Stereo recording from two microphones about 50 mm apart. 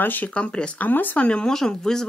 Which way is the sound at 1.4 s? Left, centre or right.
Centre.